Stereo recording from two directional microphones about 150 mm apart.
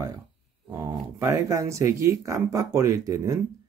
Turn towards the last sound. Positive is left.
turn(degrees=-20)  # may be behind; listen again after turning